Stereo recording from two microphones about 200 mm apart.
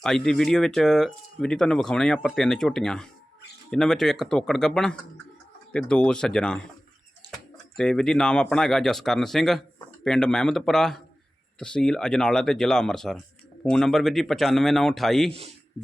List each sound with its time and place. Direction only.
0.0 s speech: 5° left (ahead or behind)
7.8 s speech: 5° left (ahead or behind)
15.3 s speech: 30° right (ahead or behind)